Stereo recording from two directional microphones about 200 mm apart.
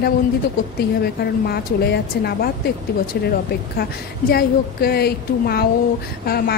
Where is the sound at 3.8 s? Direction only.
50° left (ahead or behind).